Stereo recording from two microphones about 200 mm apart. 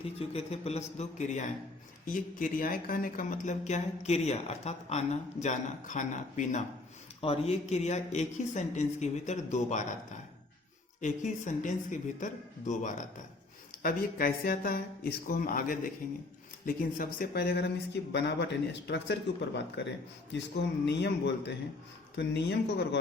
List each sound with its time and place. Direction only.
0.0 s speech: 30° left (ahead or behind)
11.0 s speech: 40° left (ahead or behind); by 23.0 s 60° left (ahead or behind)